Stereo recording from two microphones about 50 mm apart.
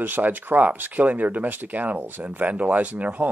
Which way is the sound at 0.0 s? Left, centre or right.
Right.